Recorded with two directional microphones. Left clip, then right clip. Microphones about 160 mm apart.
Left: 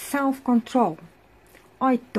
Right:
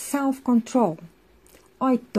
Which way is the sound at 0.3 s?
25° right (ahead or behind).